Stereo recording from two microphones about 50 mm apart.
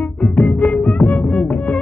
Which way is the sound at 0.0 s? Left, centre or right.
Left.